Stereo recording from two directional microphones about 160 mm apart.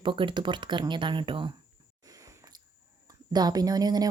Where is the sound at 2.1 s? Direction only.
20° right (ahead or behind).